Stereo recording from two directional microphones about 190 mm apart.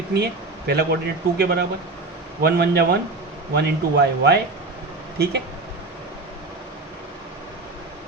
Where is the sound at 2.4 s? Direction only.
60° right (ahead or behind).